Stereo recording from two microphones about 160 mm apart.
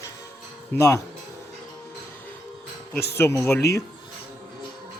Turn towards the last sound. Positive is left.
turn(degrees=15)  # may be behind; listen again after turning